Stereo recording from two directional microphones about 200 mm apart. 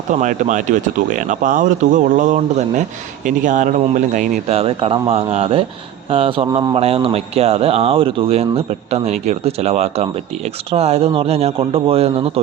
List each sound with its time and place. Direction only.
0.1 s speech: 40° right (ahead or behind)